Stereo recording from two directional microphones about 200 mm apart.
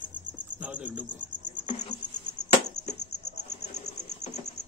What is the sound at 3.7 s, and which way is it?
Cricket, 35° left (ahead or behind).